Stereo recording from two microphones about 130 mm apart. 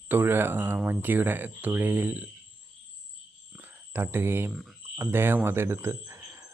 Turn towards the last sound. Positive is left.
turn(degrees=-20)  # may be behind; listen again after turning